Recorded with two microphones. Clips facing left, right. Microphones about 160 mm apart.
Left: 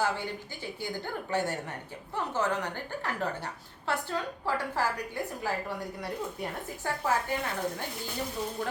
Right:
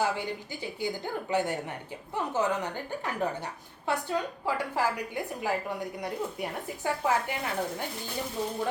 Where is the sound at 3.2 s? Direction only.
15° right (ahead or behind).